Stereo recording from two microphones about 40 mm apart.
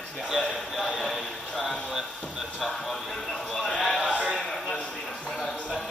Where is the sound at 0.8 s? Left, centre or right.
Centre.